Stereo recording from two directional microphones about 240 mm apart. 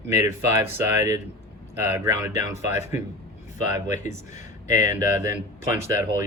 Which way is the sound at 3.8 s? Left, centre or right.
Left.